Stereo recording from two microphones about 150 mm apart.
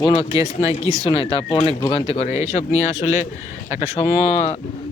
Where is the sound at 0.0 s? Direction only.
35° left (ahead or behind).